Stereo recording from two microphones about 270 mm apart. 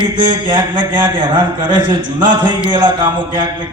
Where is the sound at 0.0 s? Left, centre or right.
Centre.